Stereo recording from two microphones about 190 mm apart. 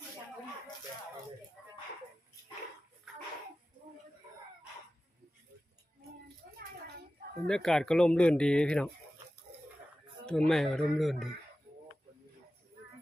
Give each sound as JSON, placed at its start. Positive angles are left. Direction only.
{"t": 6.4, "sound": "a sound", "side_deg": -60}
{"t": 7.4, "sound": "speech", "side_deg": 5}
{"t": 10.2, "sound": "speech", "side_deg": 5}